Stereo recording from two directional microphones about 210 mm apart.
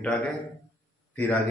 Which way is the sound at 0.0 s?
5° left (ahead or behind).